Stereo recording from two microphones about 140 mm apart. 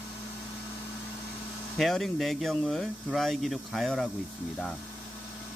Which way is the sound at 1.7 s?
Centre (ahead or behind).